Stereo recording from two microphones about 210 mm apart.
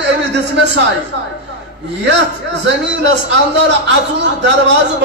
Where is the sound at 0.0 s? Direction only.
55° right (ahead or behind).